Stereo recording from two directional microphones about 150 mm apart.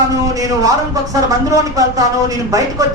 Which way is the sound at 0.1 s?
20° right (ahead or behind).